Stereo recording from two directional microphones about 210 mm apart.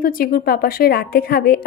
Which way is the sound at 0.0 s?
45° left (ahead or behind).